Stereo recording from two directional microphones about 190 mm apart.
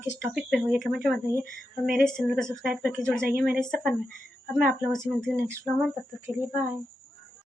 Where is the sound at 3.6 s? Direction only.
Centre (ahead or behind).